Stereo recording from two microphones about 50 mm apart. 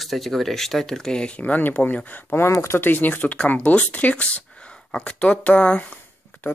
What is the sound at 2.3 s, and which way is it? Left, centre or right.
Speech, left.